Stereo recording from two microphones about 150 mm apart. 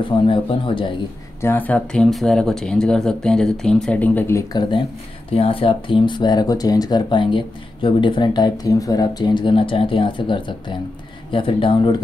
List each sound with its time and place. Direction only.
0.0 s speech: 35° left (ahead or behind)
1.4 s speech: 10° left (ahead or behind); by 12.0 s 30° left (ahead or behind)